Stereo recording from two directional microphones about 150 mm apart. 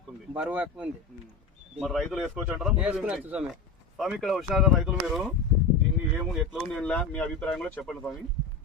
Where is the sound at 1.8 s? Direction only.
Centre (ahead or behind).